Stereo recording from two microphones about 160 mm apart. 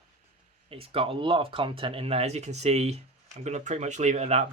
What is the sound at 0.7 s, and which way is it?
Speech, 35° right (ahead or behind).